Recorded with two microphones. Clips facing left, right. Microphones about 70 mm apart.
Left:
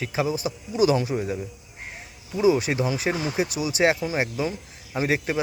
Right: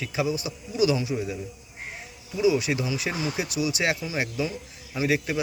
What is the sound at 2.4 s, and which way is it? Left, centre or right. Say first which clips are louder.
A man's voice: left 2 dB; left.